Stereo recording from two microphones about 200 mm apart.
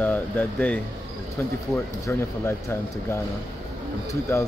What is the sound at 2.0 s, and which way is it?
Speech, 10° left (ahead or behind).